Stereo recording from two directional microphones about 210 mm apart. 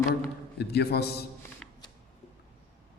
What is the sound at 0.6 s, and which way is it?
Speech, 50° left (ahead or behind).